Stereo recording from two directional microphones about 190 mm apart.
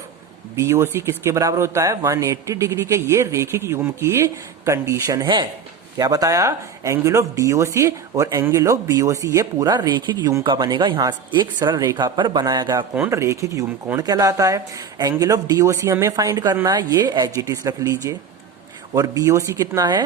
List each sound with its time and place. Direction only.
0.5 s speech: 15° right (ahead or behind)